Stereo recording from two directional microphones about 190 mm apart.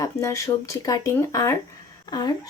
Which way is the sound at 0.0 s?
15° left (ahead or behind).